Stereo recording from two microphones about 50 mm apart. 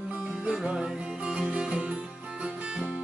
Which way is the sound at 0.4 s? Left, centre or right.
Centre.